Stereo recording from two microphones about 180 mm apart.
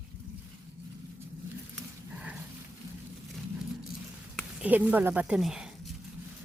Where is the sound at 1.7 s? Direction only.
5° right (ahead or behind).